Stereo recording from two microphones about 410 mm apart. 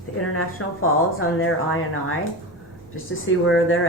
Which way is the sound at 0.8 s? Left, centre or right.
Left.